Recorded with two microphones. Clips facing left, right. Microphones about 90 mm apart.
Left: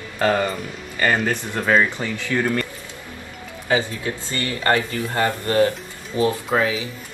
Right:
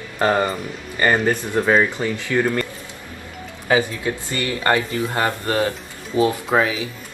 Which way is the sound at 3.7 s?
20° right (ahead or behind).